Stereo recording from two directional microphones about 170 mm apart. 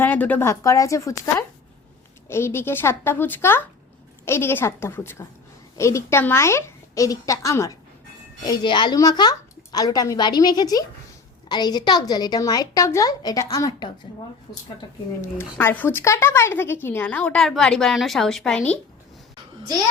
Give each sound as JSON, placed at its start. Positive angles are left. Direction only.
{"t": 0.0, "sound": "a woman's voice", "side_deg": 10}
{"t": 15.2, "sound": "a woman's voice", "side_deg": 15}